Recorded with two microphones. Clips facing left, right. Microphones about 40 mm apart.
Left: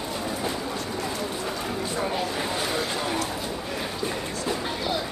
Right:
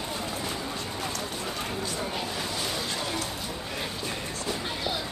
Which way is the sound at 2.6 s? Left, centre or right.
Left.